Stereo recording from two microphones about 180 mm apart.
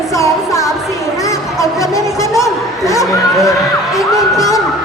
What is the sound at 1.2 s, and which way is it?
Speech, 15° left (ahead or behind).